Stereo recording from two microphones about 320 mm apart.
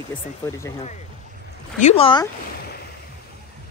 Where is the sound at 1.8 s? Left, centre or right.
Centre.